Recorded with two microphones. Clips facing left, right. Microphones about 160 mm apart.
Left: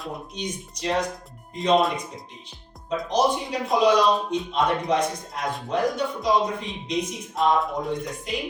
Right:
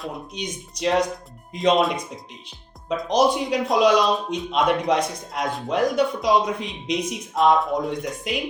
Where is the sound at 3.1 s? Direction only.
90° right.